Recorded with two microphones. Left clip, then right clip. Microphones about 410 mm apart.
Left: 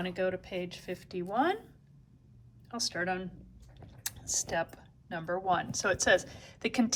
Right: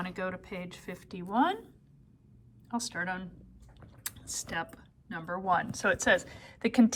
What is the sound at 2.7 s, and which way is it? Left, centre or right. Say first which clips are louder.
Speech: left 1 dB; centre.